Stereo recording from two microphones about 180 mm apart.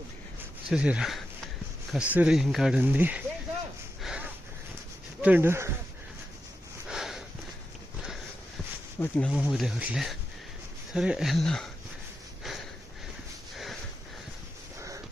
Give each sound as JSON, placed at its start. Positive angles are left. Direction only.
{"t": 0.7, "sound": "speech", "side_deg": -5}
{"t": 4.0, "sound": "a sound", "side_deg": -5}
{"t": 5.2, "sound": "speech", "side_deg": -10}
{"t": 6.8, "sound": "sniff", "side_deg": 0}
{"t": 9.0, "sound": "speech", "side_deg": 10}
{"t": 9.3, "sound": "speech", "side_deg": 0}
{"t": 14.8, "sound": "a sound", "side_deg": -15}